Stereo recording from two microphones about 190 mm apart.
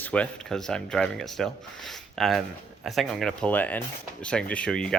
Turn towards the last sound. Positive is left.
turn(degrees=5)  # may be behind; listen again after turning